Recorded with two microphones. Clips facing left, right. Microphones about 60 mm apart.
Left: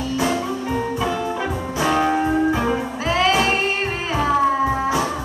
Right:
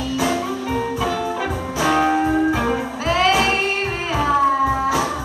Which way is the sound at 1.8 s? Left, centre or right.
Centre.